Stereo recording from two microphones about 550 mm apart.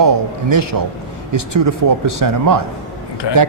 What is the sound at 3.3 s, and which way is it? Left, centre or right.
Speech, left.